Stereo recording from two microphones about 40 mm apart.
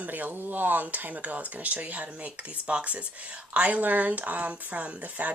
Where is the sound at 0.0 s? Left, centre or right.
Right.